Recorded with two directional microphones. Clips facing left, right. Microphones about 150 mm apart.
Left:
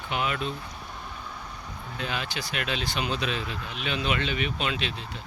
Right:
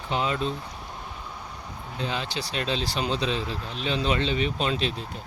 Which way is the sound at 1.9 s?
25° right (ahead or behind).